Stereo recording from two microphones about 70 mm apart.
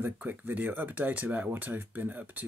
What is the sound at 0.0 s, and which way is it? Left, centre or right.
Speech, right.